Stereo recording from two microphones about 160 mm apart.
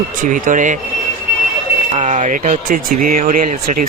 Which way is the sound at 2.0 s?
50° right (ahead or behind).